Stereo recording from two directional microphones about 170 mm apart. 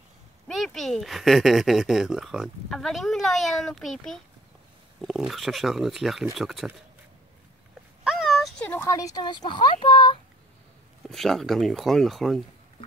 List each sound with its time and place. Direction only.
0.5 s speech: centre (ahead or behind)
8.0 s a sound: 5° right (ahead or behind); by 9.4 s 25° left (ahead or behind)
9.5 s speech: 25° left (ahead or behind)
11.1 s speech: centre (ahead or behind)